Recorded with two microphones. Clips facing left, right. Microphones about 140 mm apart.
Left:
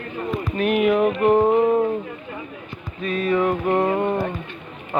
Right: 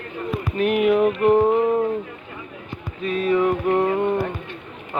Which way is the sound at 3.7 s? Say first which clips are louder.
Left 1 dB; 35° left (ahead or behind).